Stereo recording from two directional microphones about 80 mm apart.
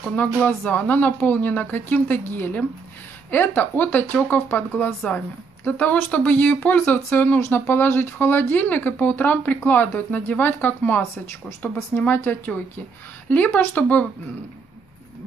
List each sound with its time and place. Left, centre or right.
0.1 s speech: centre
12.1 s speech: left